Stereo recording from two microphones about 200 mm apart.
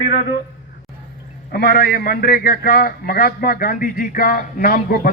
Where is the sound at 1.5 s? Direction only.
50° left (ahead or behind).